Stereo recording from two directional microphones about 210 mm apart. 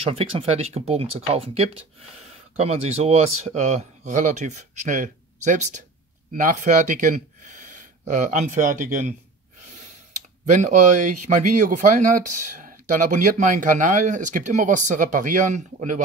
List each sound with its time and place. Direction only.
0.0 s speech: 30° right (ahead or behind)
10.5 s speech: 35° right (ahead or behind)